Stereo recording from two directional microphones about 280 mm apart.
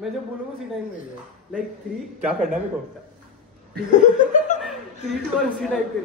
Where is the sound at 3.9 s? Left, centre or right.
Left.